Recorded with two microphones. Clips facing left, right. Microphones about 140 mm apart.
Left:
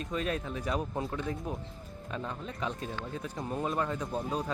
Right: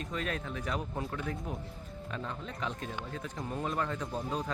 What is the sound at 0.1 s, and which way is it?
Speech, 25° left (ahead or behind).